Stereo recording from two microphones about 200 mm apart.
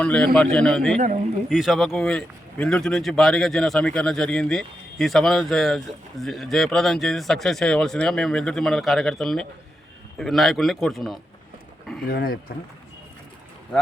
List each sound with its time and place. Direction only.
0.0 s a man's voice: 5° left (ahead or behind)
12.0 s speech: 45° left (ahead or behind)